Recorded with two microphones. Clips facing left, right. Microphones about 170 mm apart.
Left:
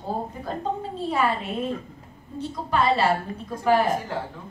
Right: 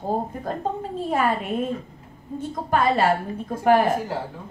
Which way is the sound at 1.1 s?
50° right (ahead or behind).